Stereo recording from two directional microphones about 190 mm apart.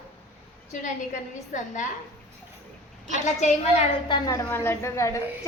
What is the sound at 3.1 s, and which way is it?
Speech, 40° left (ahead or behind).